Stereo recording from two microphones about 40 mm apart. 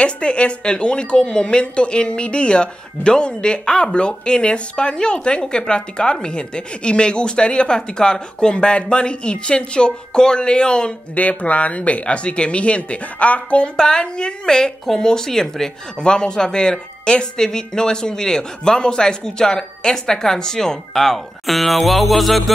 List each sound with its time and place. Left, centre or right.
0.0 s a woman's voice: left
11.1 s speech: left
13.7 s speech: centre
16.0 s speech: left; by 22.4 s centre